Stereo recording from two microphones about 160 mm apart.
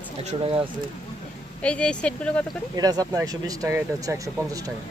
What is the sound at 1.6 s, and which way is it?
Speech, 5° left (ahead or behind).